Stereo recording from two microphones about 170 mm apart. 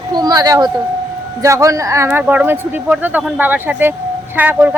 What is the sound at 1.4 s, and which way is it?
A woman's voice, 20° right (ahead or behind).